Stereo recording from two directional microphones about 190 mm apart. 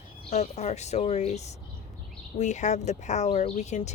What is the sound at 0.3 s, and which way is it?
Speech, 35° left (ahead or behind).